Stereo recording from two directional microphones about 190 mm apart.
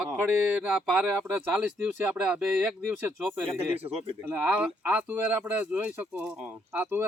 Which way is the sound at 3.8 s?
35° right (ahead or behind).